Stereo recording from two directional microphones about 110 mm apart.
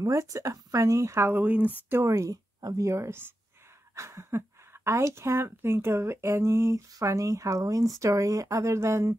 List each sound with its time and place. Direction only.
0.0 s a woman's voice: 30° right (ahead or behind)
1.9 s a woman's voice: 25° right (ahead or behind)